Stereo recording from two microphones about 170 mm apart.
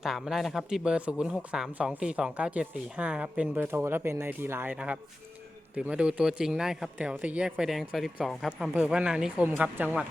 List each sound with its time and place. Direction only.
0.0 s speech: centre (ahead or behind)